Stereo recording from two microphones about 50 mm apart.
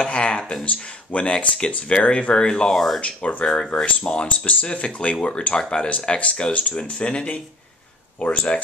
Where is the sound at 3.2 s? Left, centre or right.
Left.